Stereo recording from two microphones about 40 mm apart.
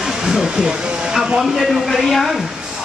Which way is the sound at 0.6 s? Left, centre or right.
Right.